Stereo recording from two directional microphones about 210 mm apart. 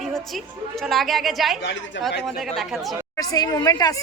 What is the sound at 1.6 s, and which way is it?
Speech, 60° left (ahead or behind).